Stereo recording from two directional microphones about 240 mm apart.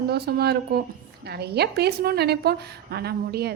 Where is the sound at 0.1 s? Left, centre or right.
Right.